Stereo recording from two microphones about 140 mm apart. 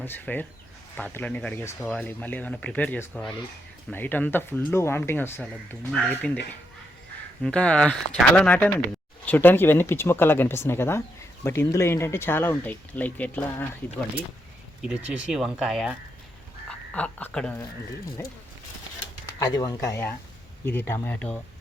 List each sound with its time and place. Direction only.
0.0 s speech: 15° left (ahead or behind)
7.4 s speech: 5° left (ahead or behind)
14.8 s speech: 10° right (ahead or behind)
16.6 s speech: 10° left (ahead or behind)
19.2 s speech: 25° left (ahead or behind)